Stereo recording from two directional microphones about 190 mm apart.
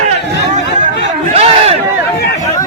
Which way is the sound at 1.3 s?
30° right (ahead or behind).